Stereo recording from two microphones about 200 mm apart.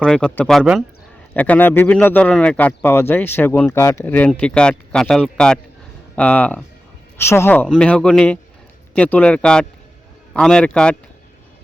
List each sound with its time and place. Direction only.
0.0 s speech: 5° left (ahead or behind)